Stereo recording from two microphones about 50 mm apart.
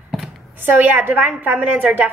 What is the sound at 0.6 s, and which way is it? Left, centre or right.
A woman's voice, right.